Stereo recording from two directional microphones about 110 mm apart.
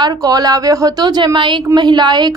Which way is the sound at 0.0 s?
40° right (ahead or behind).